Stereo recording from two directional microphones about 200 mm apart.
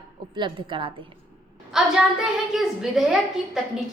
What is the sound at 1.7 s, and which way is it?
A woman's voice, centre (ahead or behind).